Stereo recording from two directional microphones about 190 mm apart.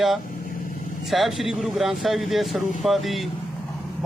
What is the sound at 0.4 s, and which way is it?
Vehicle, 50° left (ahead or behind).